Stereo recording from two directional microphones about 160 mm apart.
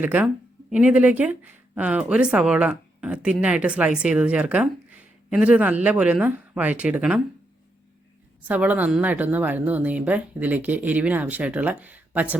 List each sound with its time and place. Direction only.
0.0 s speech: 10° right (ahead or behind)
8.4 s speech: 10° right (ahead or behind)